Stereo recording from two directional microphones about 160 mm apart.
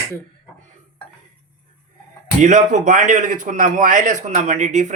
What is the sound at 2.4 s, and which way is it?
A man's voice, 50° right (ahead or behind).